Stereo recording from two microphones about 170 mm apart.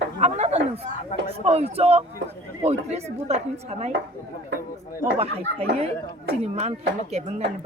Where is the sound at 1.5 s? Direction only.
35° right (ahead or behind).